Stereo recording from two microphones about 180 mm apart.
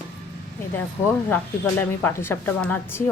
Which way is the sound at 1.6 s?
15° left (ahead or behind).